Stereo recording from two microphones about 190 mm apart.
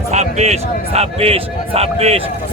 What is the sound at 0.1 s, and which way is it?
Speech, 35° right (ahead or behind).